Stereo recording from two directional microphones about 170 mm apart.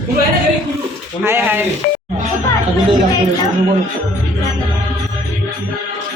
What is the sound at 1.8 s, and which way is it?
Speech, 60° left (ahead or behind).